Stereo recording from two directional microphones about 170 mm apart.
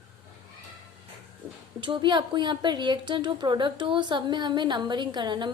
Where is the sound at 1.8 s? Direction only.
25° right (ahead or behind).